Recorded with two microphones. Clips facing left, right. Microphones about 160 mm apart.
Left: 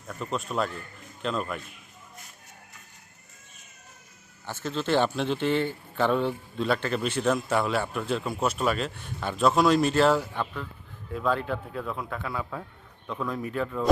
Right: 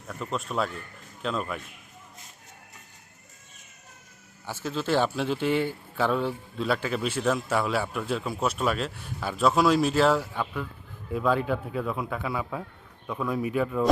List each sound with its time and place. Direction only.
0.1 s a man's voice: centre (ahead or behind)
4.4 s a man's voice: 10° right (ahead or behind)